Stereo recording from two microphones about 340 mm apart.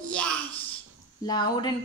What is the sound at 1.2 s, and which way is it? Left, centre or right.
Speech, centre.